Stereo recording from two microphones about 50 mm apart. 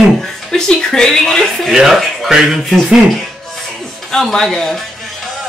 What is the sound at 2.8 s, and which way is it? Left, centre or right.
Music, centre.